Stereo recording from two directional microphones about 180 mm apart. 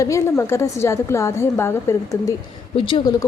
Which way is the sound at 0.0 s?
15° left (ahead or behind).